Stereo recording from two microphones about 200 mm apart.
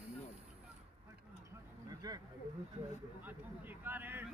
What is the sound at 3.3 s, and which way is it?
A man's voice, 10° right (ahead or behind).